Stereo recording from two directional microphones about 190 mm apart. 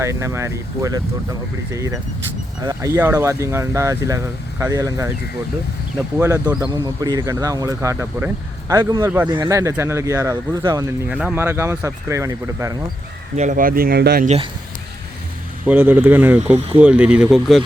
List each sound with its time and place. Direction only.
0.0 s speech: 15° right (ahead or behind)
6.1 s speech: 15° right (ahead or behind)
11.1 s speech: 5° right (ahead or behind)
13.3 s speech: 40° right (ahead or behind); by 14.3 s 55° right (ahead or behind)
15.6 s speech: 10° right (ahead or behind)